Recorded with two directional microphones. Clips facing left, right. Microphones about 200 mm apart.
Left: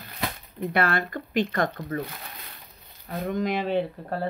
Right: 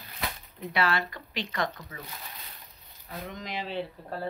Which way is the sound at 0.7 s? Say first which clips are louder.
Left 3 dB; 50° left (ahead or behind).